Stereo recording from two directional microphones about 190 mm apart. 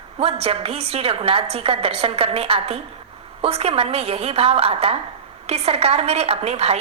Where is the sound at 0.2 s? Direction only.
30° right (ahead or behind).